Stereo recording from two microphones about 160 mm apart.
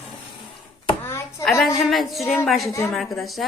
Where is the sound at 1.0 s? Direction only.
15° left (ahead or behind).